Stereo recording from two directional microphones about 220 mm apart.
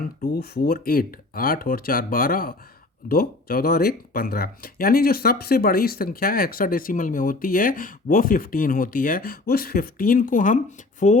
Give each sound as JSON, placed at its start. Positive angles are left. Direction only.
{"t": 0.2, "sound": "speech", "side_deg": 40}